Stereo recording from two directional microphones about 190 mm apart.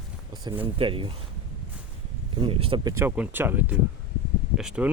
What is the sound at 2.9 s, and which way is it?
Speech, 10° right (ahead or behind).